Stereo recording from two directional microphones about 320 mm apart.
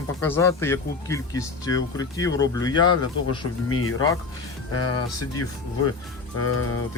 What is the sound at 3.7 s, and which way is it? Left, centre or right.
Speech, left.